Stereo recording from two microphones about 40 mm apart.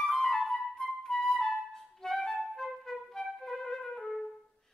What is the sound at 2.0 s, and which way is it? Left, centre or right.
Music, centre.